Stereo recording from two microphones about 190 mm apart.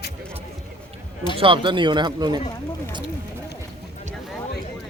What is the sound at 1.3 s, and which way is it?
Speech, 25° right (ahead or behind).